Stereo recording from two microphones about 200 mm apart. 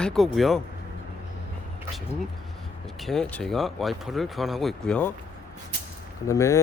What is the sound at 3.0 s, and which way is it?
Speech, centre (ahead or behind).